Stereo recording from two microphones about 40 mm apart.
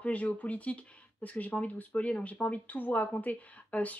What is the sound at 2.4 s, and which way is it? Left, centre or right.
Speech, left.